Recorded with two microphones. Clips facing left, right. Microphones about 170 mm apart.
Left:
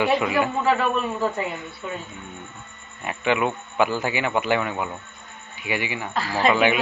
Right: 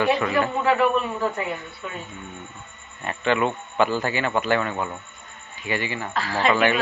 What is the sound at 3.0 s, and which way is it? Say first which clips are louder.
Speech: even; 10° left (ahead or behind).